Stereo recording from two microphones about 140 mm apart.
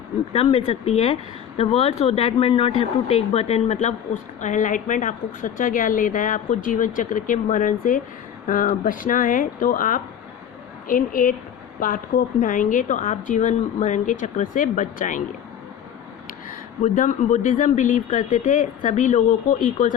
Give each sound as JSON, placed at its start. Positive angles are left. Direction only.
{"t": 0.7, "sound": "a woman's voice", "side_deg": 50}
{"t": 16.5, "sound": "speech", "side_deg": 65}